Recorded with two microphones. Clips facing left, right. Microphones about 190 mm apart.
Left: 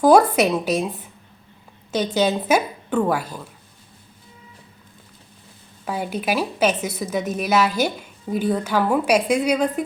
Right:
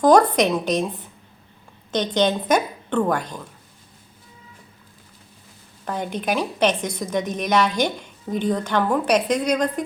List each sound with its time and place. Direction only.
0.0 s a woman's voice: 10° left (ahead or behind)
5.8 s a woman's voice: 5° left (ahead or behind)